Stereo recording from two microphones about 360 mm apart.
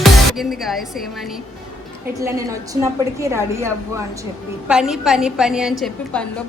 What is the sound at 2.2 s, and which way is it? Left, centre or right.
A woman's voice, centre.